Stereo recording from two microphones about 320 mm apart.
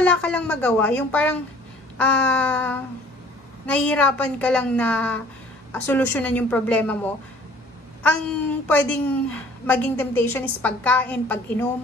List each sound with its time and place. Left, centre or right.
0.0 s a woman's voice: centre
8.6 s a woman's voice: centre